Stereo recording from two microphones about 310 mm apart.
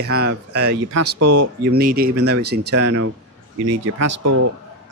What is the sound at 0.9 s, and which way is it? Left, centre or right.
Speech, right.